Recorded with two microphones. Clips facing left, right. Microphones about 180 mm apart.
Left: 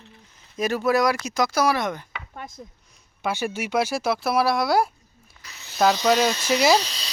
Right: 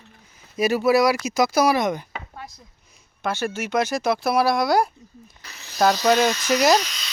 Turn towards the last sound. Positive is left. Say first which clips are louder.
# right 1 dB
turn(degrees=30)  # may be behind; listen again after turning